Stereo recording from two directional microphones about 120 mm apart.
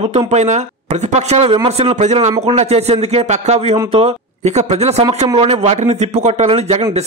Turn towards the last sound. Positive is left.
turn(degrees=-65)  # may be behind; listen again after turning